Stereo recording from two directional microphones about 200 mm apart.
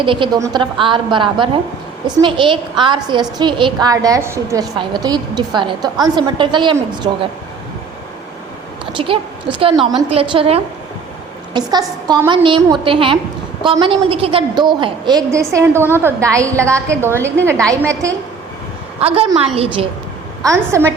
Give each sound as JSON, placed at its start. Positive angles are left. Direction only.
{"t": 0.0, "sound": "a woman's voice", "side_deg": -25}
{"t": 8.9, "sound": "a woman's voice", "side_deg": -25}
{"t": 18.9, "sound": "a woman's voice", "side_deg": -30}
{"t": 20.4, "sound": "a woman's voice", "side_deg": -15}